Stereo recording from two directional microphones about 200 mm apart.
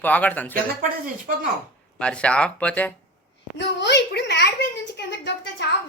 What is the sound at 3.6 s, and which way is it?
A woman's voice, 60° left (ahead or behind).